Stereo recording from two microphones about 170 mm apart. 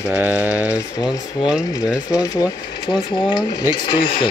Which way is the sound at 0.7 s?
20° left (ahead or behind).